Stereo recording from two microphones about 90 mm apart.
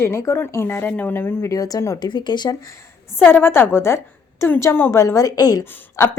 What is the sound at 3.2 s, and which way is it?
A woman's voice, 25° left (ahead or behind).